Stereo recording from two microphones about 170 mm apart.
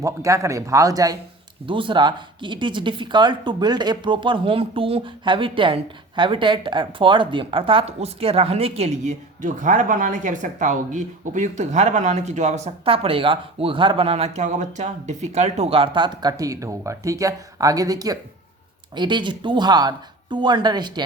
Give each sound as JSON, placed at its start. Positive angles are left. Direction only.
{"t": 0.0, "sound": "speech", "side_deg": -20}